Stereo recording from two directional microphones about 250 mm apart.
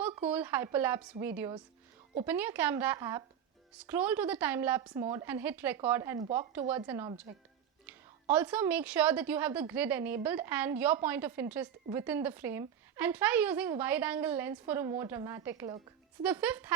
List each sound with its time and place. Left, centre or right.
0.3 s a woman's voice: centre